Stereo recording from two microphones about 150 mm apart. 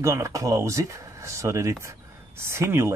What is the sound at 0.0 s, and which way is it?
Speech, 20° right (ahead or behind).